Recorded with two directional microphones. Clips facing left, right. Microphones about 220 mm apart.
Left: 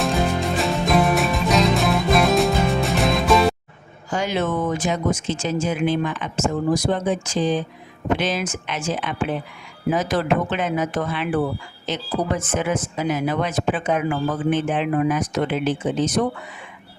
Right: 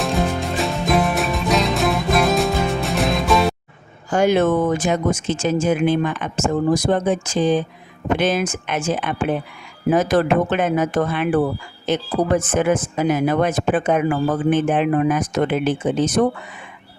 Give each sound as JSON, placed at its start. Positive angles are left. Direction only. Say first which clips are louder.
{"t": 0.0, "sound": "music", "louder": "even", "side_deg": 0}
{"t": 4.1, "sound": "speech", "louder": "right 7 dB", "side_deg": -50}